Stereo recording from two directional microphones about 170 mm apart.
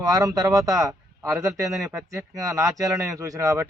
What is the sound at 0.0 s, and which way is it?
A man's voice, 20° right (ahead or behind).